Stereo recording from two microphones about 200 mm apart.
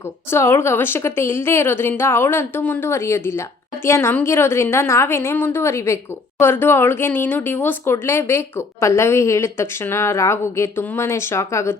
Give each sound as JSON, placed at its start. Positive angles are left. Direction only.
{"t": 0.3, "sound": "speech", "side_deg": 10}